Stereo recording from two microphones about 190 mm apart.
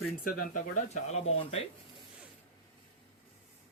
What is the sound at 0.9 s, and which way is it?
Speech, 35° left (ahead or behind).